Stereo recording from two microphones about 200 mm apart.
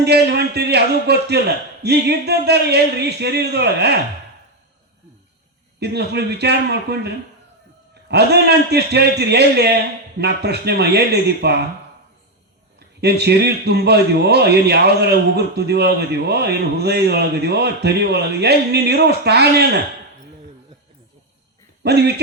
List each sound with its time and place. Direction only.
0.0 s a man's voice: 55° right (ahead or behind)
5.8 s a man's voice: 55° right (ahead or behind)
13.0 s a man's voice: 55° right (ahead or behind)
21.8 s a man's voice: 55° right (ahead or behind)